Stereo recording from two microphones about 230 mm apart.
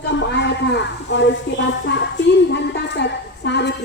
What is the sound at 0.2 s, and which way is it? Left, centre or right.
A woman's voice, left.